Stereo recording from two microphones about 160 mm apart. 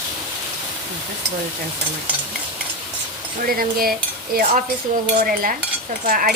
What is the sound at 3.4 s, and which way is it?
Speech, 70° right (ahead or behind).